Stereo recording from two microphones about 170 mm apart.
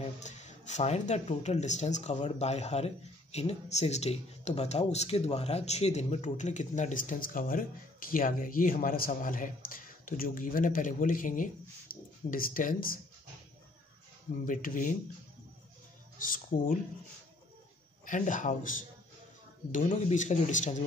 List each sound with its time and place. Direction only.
0.0 s speech: 45° left (ahead or behind)
14.4 s speech: 55° left (ahead or behind)
16.2 s speech: 55° left (ahead or behind)
18.0 s speech: 50° left (ahead or behind)